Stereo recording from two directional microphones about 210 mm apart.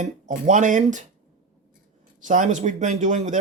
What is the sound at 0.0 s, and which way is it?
Speech, 35° right (ahead or behind).